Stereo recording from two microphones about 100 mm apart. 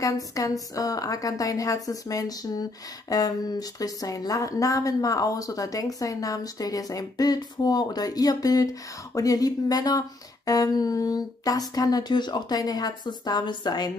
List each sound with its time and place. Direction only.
0.0 s a woman's voice: 35° left (ahead or behind)